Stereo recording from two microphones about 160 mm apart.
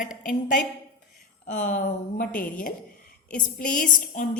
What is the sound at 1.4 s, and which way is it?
A woman's voice, 50° left (ahead or behind).